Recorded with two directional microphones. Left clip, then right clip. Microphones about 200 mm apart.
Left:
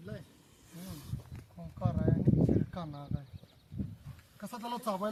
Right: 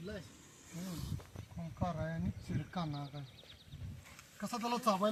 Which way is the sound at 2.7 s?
15° left (ahead or behind).